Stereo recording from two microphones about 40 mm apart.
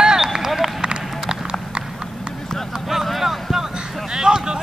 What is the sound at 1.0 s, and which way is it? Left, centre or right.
Clip-clop, centre.